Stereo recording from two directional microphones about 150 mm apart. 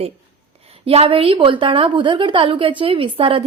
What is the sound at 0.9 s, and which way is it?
A woman's voice, 40° right (ahead or behind).